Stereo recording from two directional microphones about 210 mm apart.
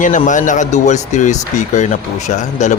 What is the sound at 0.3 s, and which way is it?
Speech, 35° left (ahead or behind).